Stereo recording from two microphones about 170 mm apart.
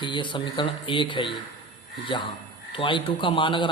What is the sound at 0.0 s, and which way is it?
A man's voice, 30° left (ahead or behind).